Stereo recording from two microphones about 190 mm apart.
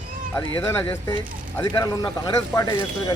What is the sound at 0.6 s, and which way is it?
Speech, 10° left (ahead or behind).